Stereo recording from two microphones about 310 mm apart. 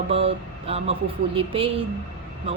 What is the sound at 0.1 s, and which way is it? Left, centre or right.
A woman's voice, centre.